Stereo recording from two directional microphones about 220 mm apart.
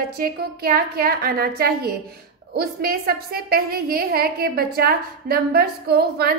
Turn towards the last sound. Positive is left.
turn(degrees=-45)  # may be behind; listen again after turning